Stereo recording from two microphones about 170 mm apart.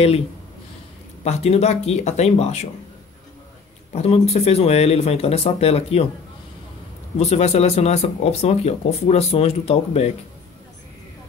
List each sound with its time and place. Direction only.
1.2 s speech: 40° left (ahead or behind)
3.9 s speech: 40° left (ahead or behind)
7.2 s speech: 40° left (ahead or behind)